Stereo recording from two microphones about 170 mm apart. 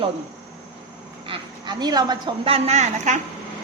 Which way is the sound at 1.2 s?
30° right (ahead or behind).